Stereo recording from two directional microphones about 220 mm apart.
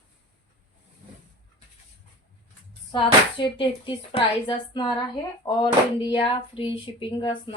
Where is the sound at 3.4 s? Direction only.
25° left (ahead or behind).